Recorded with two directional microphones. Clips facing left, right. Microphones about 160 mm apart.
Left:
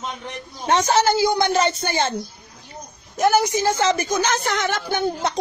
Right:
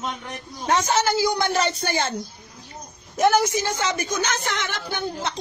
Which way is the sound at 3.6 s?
30° left (ahead or behind).